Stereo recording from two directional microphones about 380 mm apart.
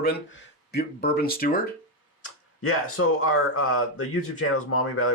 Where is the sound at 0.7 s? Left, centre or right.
Left.